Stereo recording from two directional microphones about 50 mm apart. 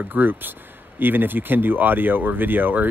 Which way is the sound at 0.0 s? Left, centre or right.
Right.